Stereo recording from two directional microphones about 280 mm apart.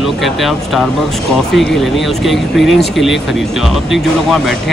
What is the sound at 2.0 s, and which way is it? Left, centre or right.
Speech, centre.